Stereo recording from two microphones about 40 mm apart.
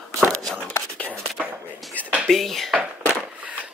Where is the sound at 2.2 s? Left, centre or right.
Centre.